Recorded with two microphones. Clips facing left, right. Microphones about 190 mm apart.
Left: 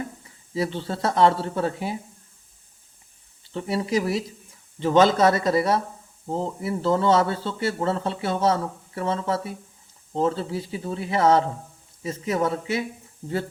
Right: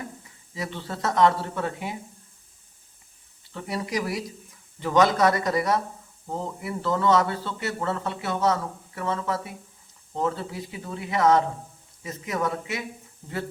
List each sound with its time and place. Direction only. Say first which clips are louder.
0.5 s speech: left 6 dB; 30° left (ahead or behind)
3.5 s a man's voice: left 5 dB; 25° left (ahead or behind)